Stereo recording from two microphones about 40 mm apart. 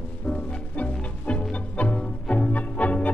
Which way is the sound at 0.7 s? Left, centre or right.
Left.